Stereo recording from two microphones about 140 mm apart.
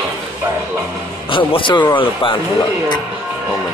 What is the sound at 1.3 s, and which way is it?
Speech, 35° left (ahead or behind).